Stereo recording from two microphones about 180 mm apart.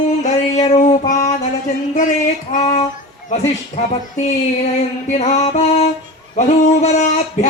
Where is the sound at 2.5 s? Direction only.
45° left (ahead or behind).